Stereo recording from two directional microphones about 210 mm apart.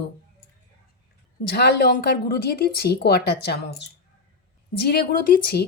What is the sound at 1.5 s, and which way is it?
Speech, 50° left (ahead or behind).